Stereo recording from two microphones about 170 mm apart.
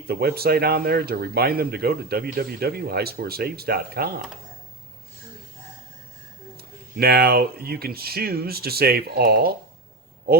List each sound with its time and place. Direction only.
0.1 s speech: 65° right (ahead or behind)
6.6 s speech: 65° right (ahead or behind)